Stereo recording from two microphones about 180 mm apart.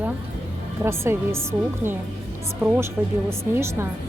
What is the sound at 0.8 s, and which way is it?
Speech, 15° right (ahead or behind).